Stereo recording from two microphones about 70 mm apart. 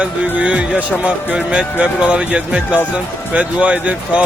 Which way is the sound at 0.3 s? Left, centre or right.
Centre.